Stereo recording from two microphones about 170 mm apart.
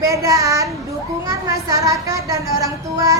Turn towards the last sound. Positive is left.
turn(degrees=-20)  # may be behind; listen again after turning